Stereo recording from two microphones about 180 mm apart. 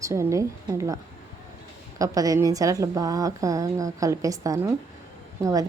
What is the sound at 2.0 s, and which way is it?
A woman's voice, 20° right (ahead or behind).